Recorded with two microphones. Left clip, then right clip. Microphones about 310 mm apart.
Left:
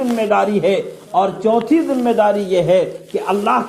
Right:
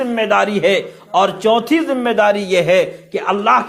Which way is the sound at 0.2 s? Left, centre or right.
Right.